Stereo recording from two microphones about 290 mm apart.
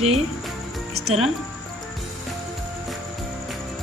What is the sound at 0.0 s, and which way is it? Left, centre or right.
Speech, right.